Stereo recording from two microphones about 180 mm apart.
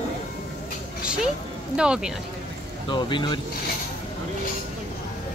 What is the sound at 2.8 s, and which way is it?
Speech, 25° left (ahead or behind).